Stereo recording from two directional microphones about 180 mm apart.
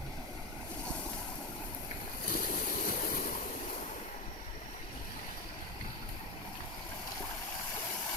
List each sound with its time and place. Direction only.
2.3 s stream: 50° left (ahead or behind)